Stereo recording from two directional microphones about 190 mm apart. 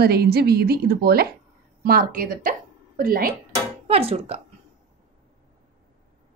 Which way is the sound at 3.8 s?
30° right (ahead or behind).